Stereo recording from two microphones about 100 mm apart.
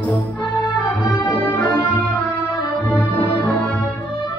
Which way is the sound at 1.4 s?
25° left (ahead or behind).